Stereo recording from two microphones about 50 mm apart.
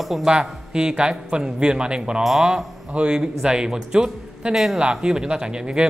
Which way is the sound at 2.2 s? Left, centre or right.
Centre.